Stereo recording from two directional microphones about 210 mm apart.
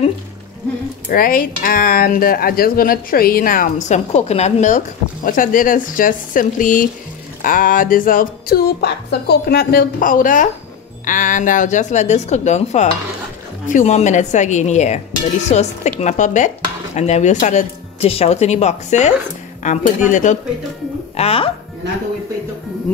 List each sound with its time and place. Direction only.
1.1 s speech: 45° left (ahead or behind); by 21.5 s 30° left (ahead or behind)